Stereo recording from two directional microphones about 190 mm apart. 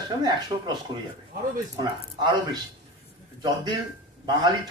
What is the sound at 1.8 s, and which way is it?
Speech, 25° right (ahead or behind).